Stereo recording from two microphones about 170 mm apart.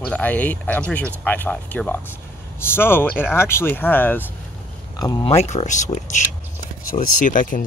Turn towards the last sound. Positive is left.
turn(degrees=50)  # may be behind; listen again after turning